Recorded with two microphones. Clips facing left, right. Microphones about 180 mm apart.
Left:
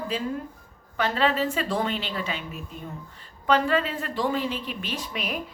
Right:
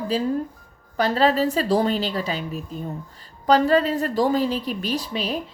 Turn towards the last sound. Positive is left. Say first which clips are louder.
# right 6 dB
turn(degrees=-30)  # may be behind; listen again after turning